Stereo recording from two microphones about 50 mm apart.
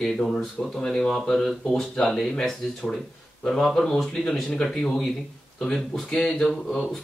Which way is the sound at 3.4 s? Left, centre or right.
Centre.